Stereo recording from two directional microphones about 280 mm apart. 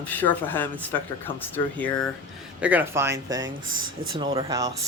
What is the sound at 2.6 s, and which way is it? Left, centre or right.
Speech, centre.